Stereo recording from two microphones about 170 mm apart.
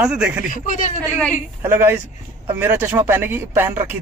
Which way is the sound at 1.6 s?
15° right (ahead or behind).